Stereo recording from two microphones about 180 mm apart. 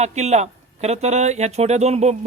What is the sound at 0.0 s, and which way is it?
A man's voice, 40° right (ahead or behind).